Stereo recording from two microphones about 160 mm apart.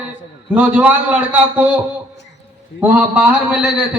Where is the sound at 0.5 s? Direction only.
10° right (ahead or behind).